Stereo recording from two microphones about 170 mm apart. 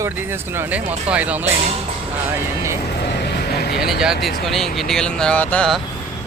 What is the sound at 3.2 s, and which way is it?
Vehicle, 75° left (ahead or behind).